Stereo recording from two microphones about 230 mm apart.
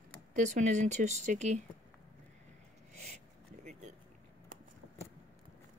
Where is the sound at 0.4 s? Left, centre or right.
Right.